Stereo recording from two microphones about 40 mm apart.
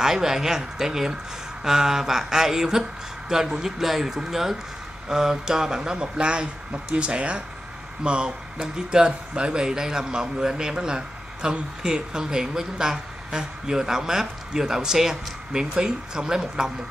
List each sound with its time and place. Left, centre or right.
0.0 s a man's voice: centre